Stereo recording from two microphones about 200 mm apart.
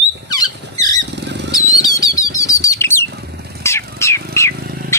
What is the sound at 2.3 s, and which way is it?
Chirp, 15° left (ahead or behind).